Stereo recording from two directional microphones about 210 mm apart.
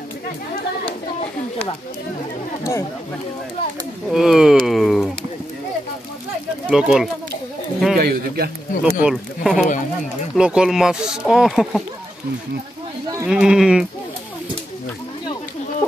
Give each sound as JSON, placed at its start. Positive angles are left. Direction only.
{"t": 4.1, "sound": "speech", "side_deg": 0}
{"t": 4.6, "sound": "a sound", "side_deg": 0}
{"t": 6.7, "sound": "speech", "side_deg": -5}
{"t": 8.0, "sound": "a man's voice", "side_deg": -45}
{"t": 9.0, "sound": "speech", "side_deg": -5}
{"t": 13.2, "sound": "speech", "side_deg": -5}